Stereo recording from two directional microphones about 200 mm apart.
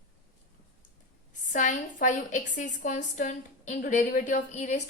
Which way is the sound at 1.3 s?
40° left (ahead or behind).